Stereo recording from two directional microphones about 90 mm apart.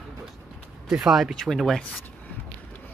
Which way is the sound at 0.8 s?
5° right (ahead or behind).